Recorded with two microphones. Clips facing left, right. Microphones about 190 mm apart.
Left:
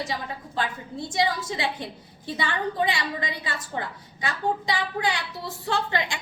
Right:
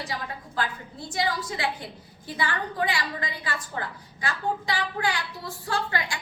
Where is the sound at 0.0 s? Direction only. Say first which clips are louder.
Left 3 dB; 25° left (ahead or behind).